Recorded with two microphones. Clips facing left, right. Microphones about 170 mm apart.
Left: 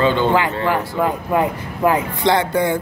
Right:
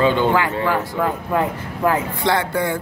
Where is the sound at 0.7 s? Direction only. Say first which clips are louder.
Left 2 dB; 15° left (ahead or behind).